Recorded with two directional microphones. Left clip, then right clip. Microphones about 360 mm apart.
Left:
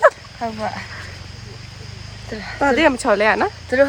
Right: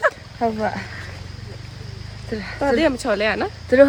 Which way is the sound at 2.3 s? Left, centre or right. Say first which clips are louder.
Right 1 dB; centre.